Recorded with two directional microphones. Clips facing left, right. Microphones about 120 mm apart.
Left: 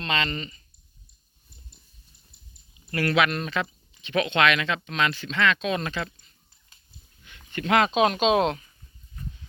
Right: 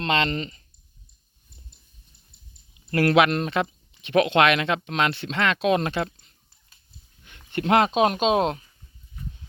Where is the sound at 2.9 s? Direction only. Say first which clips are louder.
Right 5 dB; 50° right (ahead or behind).